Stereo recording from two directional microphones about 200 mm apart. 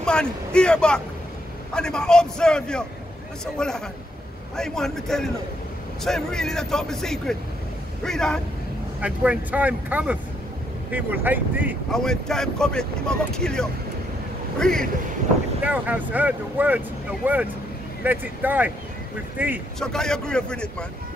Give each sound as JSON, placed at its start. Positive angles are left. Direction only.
{"t": 0.0, "sound": "speech", "side_deg": 5}
{"t": 11.9, "sound": "speech", "side_deg": 5}
{"t": 15.6, "sound": "speech", "side_deg": -10}
{"t": 19.8, "sound": "speech", "side_deg": 5}